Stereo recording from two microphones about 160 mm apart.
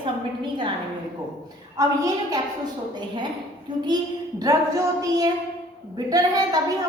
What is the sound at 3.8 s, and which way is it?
A woman's voice, 25° right (ahead or behind).